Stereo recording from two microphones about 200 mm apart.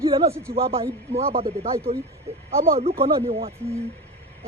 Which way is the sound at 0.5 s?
30° right (ahead or behind).